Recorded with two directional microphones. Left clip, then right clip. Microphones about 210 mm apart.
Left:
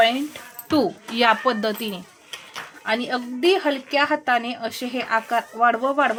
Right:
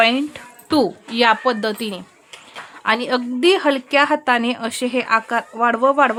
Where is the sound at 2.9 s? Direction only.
30° right (ahead or behind).